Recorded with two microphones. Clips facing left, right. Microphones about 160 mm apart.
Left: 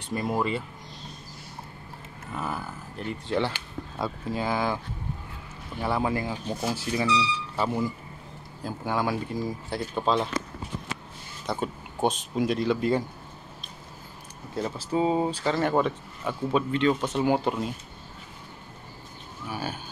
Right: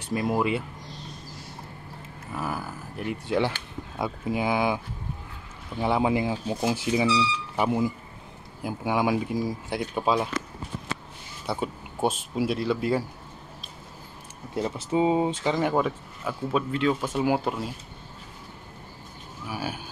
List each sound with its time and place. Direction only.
0.1 s speech: 5° right (ahead or behind)
2.3 s speech: 5° right (ahead or behind)
5.8 s speech: 15° right (ahead or behind)
11.4 s speech: 5° right (ahead or behind)
14.5 s speech: 20° right (ahead or behind); by 17.7 s 5° right (ahead or behind)
19.4 s speech: 10° right (ahead or behind)